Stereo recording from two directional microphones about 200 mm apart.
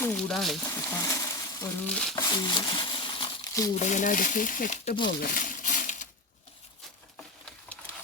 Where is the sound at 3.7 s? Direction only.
35° left (ahead or behind).